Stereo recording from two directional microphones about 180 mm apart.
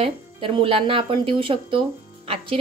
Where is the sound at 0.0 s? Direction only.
30° right (ahead or behind).